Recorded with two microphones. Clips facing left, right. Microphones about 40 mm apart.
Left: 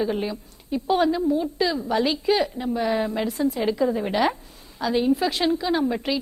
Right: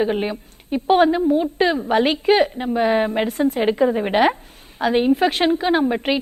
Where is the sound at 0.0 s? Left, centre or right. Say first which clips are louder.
Right 4 dB; right.